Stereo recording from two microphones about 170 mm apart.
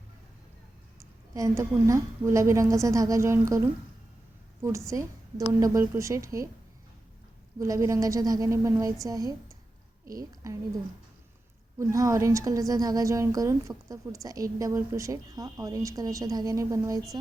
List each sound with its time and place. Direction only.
1.3 s a woman's voice: 20° right (ahead or behind)
7.6 s a woman's voice: 20° right (ahead or behind)
11.8 s a woman's voice: 15° right (ahead or behind)